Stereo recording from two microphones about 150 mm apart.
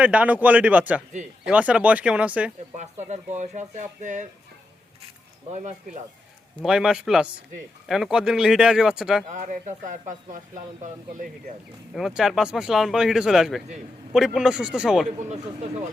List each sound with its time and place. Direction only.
0.0 s speech: 10° right (ahead or behind)
2.7 s speech: 50° right (ahead or behind)
5.5 s speech: 55° right (ahead or behind)
6.6 s speech: 5° right (ahead or behind)
9.3 s speech: 60° right (ahead or behind)
11.9 s speech: 5° right (ahead or behind)
15.2 s speech: 50° right (ahead or behind)